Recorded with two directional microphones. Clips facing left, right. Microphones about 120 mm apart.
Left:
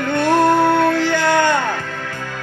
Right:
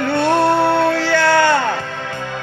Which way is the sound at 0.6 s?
30° right (ahead or behind).